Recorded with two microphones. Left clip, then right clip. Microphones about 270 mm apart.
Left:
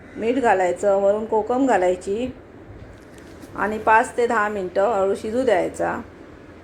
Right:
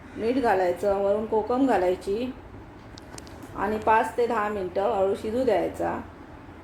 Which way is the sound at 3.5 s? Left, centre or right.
Centre.